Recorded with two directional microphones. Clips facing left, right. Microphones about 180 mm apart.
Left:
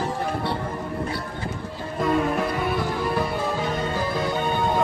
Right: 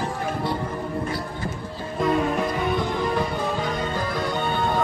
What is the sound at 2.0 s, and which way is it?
Music, centre (ahead or behind).